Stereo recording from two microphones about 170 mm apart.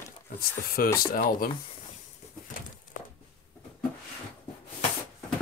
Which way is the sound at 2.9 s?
50° left (ahead or behind).